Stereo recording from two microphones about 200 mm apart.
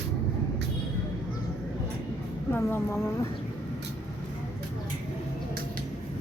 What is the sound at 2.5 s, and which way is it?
Speech, 10° left (ahead or behind).